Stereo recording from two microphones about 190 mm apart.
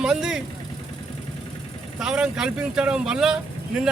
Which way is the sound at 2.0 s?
5° right (ahead or behind).